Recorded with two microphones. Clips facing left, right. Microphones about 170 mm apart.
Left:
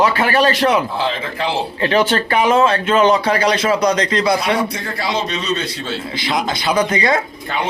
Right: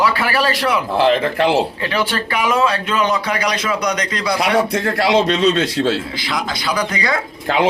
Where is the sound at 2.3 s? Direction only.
25° left (ahead or behind).